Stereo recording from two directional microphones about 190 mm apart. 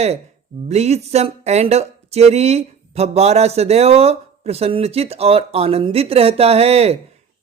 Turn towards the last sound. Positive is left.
turn(degrees=-35)  # may be behind; listen again after turning